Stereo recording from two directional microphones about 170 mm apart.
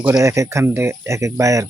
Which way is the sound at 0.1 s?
20° right (ahead or behind).